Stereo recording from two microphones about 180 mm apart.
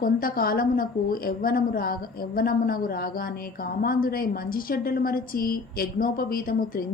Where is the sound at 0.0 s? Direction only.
55° left (ahead or behind).